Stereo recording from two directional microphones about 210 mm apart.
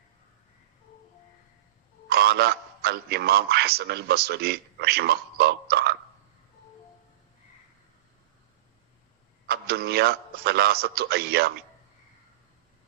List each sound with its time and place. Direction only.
2.0 s a man's voice: 50° right (ahead or behind)
9.5 s a man's voice: 50° right (ahead or behind)